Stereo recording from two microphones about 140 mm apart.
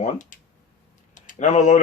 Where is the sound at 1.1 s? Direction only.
60° left (ahead or behind).